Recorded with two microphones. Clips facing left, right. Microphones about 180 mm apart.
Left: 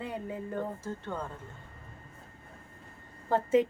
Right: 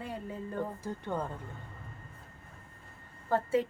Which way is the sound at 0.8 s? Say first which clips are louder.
Right 2 dB; 15° right (ahead or behind).